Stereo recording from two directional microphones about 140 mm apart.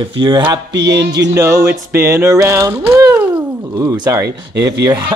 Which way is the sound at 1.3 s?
20° right (ahead or behind).